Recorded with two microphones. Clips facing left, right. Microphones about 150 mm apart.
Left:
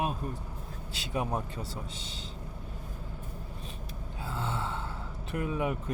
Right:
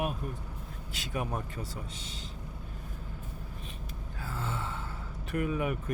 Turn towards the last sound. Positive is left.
turn(degrees=25)  # may be behind; listen again after turning